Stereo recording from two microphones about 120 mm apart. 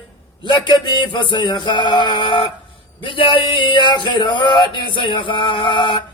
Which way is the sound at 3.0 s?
45° left (ahead or behind).